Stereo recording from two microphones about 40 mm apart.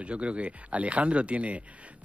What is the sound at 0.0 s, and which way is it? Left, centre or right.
A man's voice, right.